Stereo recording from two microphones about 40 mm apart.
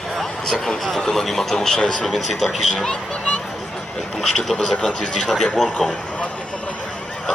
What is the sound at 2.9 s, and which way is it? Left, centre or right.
Speech, left.